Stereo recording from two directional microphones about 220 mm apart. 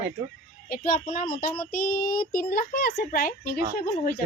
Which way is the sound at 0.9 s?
40° left (ahead or behind).